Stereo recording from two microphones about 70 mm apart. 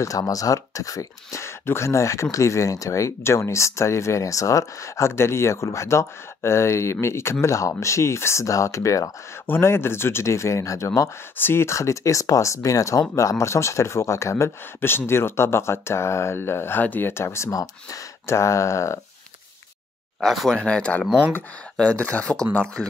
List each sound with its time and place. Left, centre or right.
0.0 s speech: left
9.5 s speech: left
11.3 s speech: left
17.5 s speech: left
18.2 s speech: left
20.2 s speech: centre
20.6 s speech: centre